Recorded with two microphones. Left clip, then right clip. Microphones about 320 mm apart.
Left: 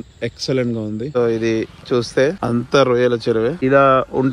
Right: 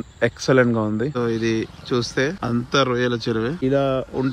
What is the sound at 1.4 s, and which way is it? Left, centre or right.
Speech, centre.